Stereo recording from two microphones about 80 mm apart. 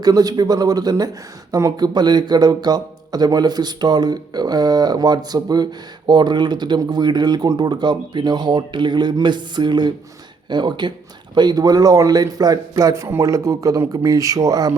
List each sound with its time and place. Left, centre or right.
0.0 s speech: right
11.3 s speech: right